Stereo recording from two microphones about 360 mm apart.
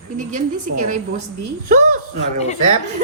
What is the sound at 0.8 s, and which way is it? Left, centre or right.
Speech, right.